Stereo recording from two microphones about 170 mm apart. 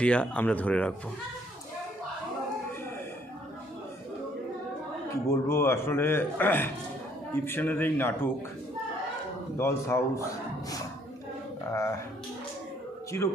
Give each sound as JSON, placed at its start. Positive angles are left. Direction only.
{"t": 0.0, "sound": "a man's voice", "side_deg": 5}
{"t": 5.3, "sound": "a man's voice", "side_deg": 15}
{"t": 9.6, "sound": "a man's voice", "side_deg": 15}
{"t": 11.7, "sound": "a man's voice", "side_deg": 15}
{"t": 13.1, "sound": "a man's voice", "side_deg": 15}